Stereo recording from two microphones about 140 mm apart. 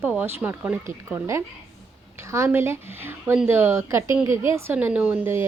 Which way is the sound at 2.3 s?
20° right (ahead or behind).